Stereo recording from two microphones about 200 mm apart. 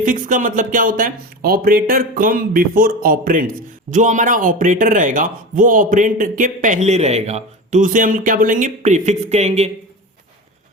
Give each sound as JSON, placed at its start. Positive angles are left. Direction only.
{"t": 0.0, "sound": "speech", "side_deg": -40}